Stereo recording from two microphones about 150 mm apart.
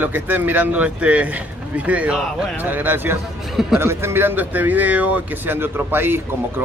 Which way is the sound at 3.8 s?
15° right (ahead or behind).